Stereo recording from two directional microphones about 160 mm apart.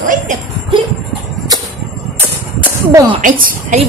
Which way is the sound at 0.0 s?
55° right (ahead or behind).